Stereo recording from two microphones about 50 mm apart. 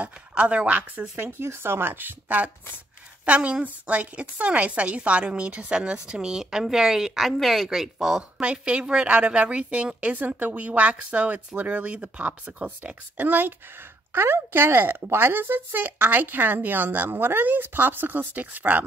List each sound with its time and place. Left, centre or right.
0.0 s a woman's voice: right
1.1 s a woman's voice: right; by 8.3 s centre
8.4 s a woman's voice: right
10.1 s speech: right
14.1 s speech: right